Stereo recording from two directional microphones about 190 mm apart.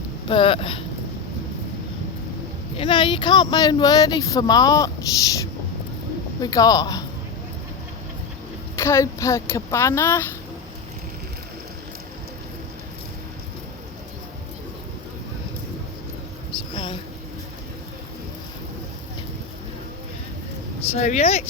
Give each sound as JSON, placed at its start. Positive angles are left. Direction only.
{"t": 0.3, "sound": "speech", "side_deg": 25}
{"t": 2.7, "sound": "speech", "side_deg": 25}
{"t": 8.7, "sound": "speech", "side_deg": 15}
{"t": 16.7, "sound": "a sound", "side_deg": 25}
{"t": 20.9, "sound": "speech", "side_deg": 35}